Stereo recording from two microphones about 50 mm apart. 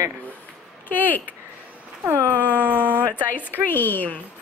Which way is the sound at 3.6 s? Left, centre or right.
Left.